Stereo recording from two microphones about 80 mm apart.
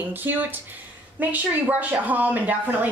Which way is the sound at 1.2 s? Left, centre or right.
Right.